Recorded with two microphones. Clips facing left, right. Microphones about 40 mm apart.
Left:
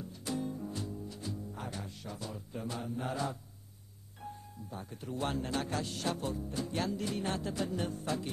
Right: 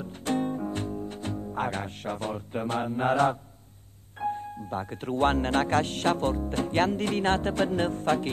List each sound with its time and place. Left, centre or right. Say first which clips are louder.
0.0 s music: right 9 dB; right
4.2 s speech: right 15 dB; right